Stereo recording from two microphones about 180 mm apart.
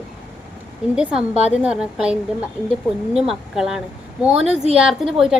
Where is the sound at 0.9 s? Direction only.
5° right (ahead or behind).